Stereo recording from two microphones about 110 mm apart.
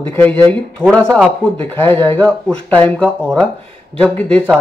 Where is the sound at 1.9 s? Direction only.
20° left (ahead or behind).